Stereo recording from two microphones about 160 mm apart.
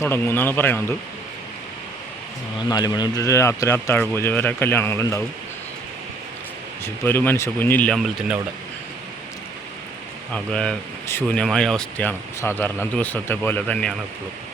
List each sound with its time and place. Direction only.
0.0 s a man's voice: 15° left (ahead or behind)
2.6 s a man's voice: 25° left (ahead or behind)
6.8 s a man's voice: 15° left (ahead or behind)
7.9 s speech: centre (ahead or behind)
10.3 s a man's voice: 5° left (ahead or behind)